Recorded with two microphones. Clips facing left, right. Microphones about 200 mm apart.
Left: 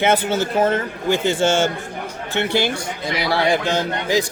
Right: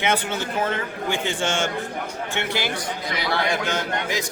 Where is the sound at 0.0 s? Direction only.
40° left (ahead or behind).